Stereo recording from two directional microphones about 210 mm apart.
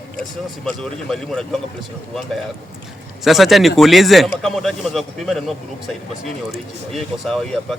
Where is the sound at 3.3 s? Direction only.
Centre (ahead or behind).